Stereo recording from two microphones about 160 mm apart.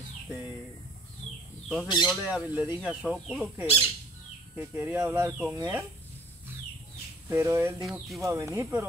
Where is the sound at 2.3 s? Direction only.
10° right (ahead or behind).